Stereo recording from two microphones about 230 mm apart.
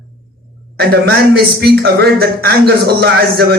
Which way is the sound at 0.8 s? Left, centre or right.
Right.